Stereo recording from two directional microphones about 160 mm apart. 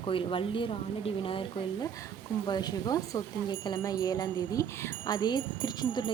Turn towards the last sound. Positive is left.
turn(degrees=25)  # may be behind; listen again after turning